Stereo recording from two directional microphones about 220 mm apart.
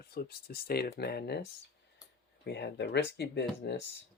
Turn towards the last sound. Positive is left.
turn(degrees=50)  # may be behind; listen again after turning